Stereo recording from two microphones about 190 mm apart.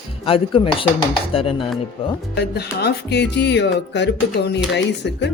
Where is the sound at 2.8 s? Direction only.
60° left (ahead or behind).